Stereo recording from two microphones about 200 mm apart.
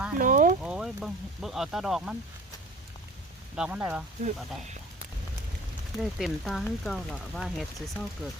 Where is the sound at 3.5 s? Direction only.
5° right (ahead or behind).